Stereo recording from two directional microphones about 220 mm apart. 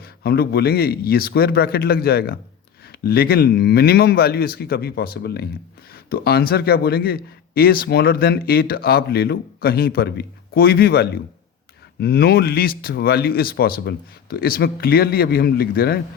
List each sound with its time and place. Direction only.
0.2 s a man's voice: 45° left (ahead or behind)